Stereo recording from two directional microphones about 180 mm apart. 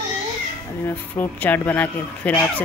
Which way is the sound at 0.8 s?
10° left (ahead or behind).